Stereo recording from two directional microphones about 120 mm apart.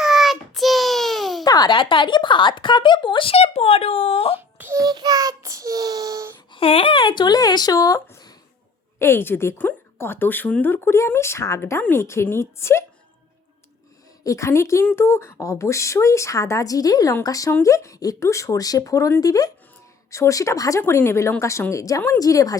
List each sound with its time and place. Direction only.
0.0 s a sound: centre (ahead or behind)
1.5 s speech: 35° left (ahead or behind); by 4.4 s 55° left (ahead or behind)
4.4 s a sound: 15° right (ahead or behind)
4.8 s child singing: 35° right (ahead or behind)
6.5 s speech: 50° left (ahead or behind); by 8.0 s 30° left (ahead or behind)
9.0 s a woman's voice: 20° left (ahead or behind)
14.3 s a woman's voice: 25° left (ahead or behind)